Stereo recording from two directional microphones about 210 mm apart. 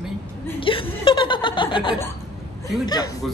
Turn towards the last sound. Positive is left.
turn(degrees=20)  # may be behind; listen again after turning